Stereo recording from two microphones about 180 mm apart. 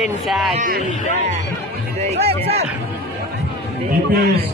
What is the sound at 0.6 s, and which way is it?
Speech, 50° right (ahead or behind).